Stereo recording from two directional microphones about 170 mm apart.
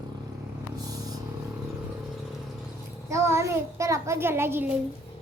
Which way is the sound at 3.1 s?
15° right (ahead or behind).